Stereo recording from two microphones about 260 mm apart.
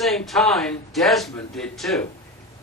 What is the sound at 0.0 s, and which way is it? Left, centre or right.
A man's voice, centre.